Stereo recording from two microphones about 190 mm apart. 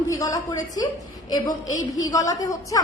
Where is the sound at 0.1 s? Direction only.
20° left (ahead or behind).